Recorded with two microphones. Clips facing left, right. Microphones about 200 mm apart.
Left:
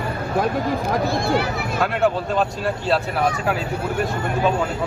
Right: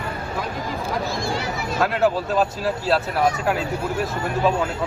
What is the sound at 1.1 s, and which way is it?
Speech, 60° left (ahead or behind).